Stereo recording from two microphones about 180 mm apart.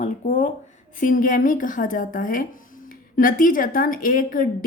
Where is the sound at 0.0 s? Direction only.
45° left (ahead or behind).